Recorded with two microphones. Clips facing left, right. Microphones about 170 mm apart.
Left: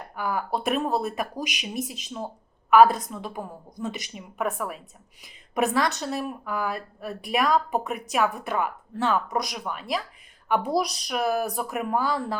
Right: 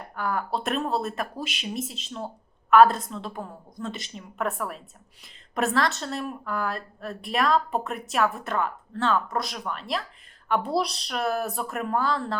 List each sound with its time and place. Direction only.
0.2 s a woman's voice: 5° left (ahead or behind)
1.4 s a woman's voice: 15° left (ahead or behind)
3.4 s speech: 15° left (ahead or behind)
4.2 s a woman's voice: centre (ahead or behind)
9.6 s a woman's voice: 5° left (ahead or behind)